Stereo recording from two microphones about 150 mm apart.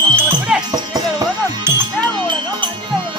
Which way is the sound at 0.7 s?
25° right (ahead or behind).